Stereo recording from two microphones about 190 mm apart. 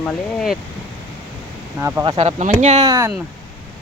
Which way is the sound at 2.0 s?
35° right (ahead or behind).